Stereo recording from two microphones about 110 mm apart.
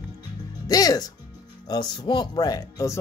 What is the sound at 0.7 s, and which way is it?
A man's voice, 35° left (ahead or behind).